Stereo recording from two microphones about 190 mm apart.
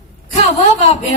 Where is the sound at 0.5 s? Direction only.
35° left (ahead or behind).